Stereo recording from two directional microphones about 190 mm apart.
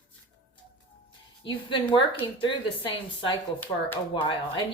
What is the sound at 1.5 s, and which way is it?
A woman's voice, 25° left (ahead or behind).